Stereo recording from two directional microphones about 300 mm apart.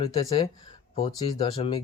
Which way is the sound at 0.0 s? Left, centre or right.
Centre.